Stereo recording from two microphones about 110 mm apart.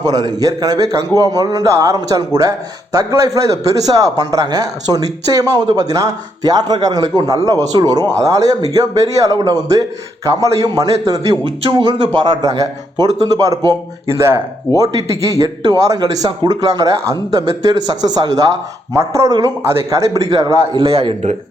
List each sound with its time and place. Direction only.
0.0 s speech: 35° right (ahead or behind)
11.6 s speech: 50° right (ahead or behind); by 13.7 s 35° right (ahead or behind)
14.1 s a man's voice: 25° right (ahead or behind)
20.7 s a man's voice: 55° right (ahead or behind)